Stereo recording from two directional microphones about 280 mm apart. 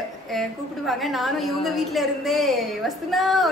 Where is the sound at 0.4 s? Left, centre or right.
Centre.